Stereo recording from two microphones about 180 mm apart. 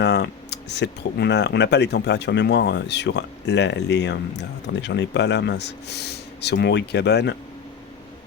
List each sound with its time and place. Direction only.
0.0 s speech: 70° left (ahead or behind)